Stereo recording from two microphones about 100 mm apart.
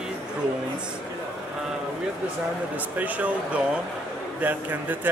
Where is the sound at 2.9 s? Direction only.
15° right (ahead or behind).